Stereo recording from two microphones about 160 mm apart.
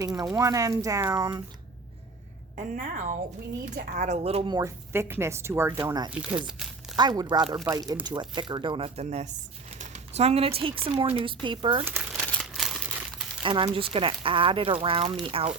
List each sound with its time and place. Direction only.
0.0 s speech: 20° right (ahead or behind)
2.6 s a woman's voice: 55° right (ahead or behind); by 4.4 s 40° right (ahead or behind)
4.4 s speech: 25° right (ahead or behind)
4.9 s a woman's voice: 15° right (ahead or behind)
5.7 s speech: 30° right (ahead or behind)
6.5 s crumpling: centre (ahead or behind)
6.9 s speech: 25° right (ahead or behind)
11.9 s crumpling: 10° right (ahead or behind)
13.4 s speech: 30° right (ahead or behind)